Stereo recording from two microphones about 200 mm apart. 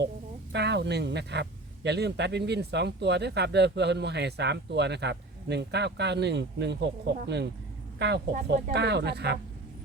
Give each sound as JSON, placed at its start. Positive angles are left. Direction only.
{"t": 0.5, "sound": "speech", "side_deg": -60}
{"t": 8.3, "sound": "speech", "side_deg": -45}
{"t": 8.7, "sound": "speech", "side_deg": -55}